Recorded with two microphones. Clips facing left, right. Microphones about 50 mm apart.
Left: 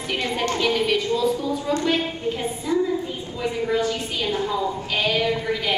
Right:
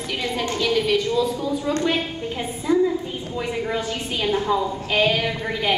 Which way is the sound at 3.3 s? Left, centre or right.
Centre.